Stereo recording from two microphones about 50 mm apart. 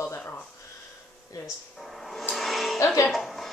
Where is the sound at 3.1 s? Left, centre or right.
Centre.